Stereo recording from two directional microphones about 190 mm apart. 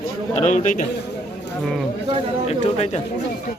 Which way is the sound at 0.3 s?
40° left (ahead or behind).